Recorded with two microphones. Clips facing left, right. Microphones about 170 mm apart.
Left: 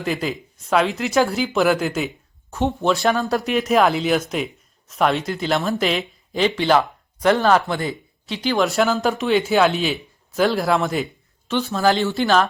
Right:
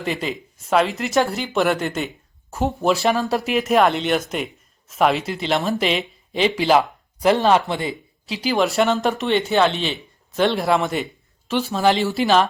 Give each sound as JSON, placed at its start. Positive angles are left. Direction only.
{"t": 0.0, "sound": "speech", "side_deg": 0}
{"t": 7.4, "sound": "speech", "side_deg": -30}
{"t": 8.4, "sound": "speech", "side_deg": 0}